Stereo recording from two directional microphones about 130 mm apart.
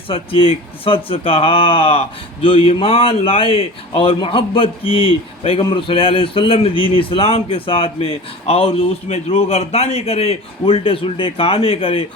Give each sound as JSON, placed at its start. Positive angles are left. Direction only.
{"t": 0.1, "sound": "speech", "side_deg": 45}